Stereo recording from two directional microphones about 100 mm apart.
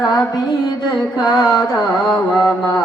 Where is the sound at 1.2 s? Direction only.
40° left (ahead or behind).